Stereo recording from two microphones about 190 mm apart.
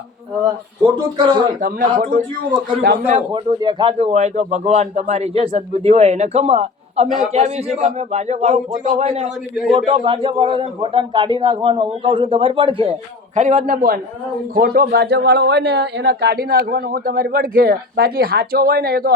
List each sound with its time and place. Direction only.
1.1 s a man's voice: 25° right (ahead or behind)
2.0 s speech: 45° right (ahead or behind)
3.1 s a man's voice: 30° right (ahead or behind)
9.7 s a man's voice: 25° right (ahead or behind); by 19.1 s 55° right (ahead or behind)